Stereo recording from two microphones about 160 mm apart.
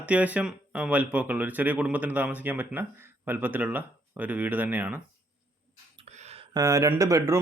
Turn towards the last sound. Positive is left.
turn(degrees=-20)  # may be behind; listen again after turning